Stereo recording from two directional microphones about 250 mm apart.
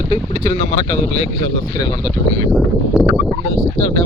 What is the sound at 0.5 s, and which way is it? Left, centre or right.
A man's voice, centre.